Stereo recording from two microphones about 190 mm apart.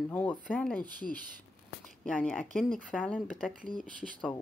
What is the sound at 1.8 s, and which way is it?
Speech, 5° left (ahead or behind).